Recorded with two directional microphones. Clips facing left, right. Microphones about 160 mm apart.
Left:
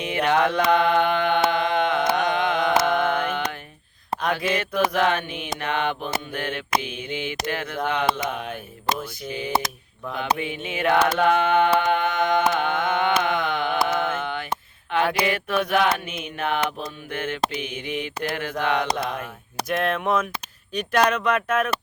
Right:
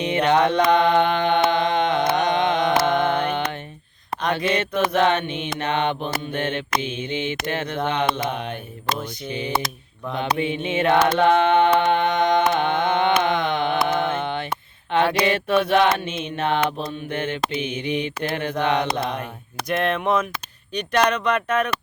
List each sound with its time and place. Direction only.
0.0 s mantra: 25° right (ahead or behind)
0.8 s carnatic music: 20° right (ahead or behind)
4.2 s mantra: 5° left (ahead or behind)
4.5 s carnatic music: 25° right (ahead or behind)
10.2 s carnatic music: 25° right (ahead or behind)
19.6 s speech: centre (ahead or behind)